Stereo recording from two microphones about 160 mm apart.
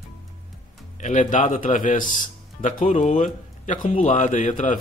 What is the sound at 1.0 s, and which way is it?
Speech, 50° left (ahead or behind).